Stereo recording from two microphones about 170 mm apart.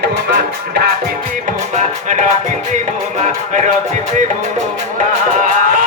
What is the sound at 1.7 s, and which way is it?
Music, 45° right (ahead or behind).